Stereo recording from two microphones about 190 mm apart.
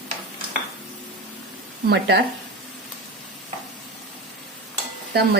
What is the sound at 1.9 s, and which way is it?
Speech, 60° right (ahead or behind).